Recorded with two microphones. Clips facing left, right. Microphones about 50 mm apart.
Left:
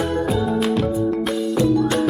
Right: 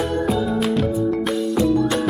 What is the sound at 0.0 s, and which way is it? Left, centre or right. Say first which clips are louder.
Music: even; centre.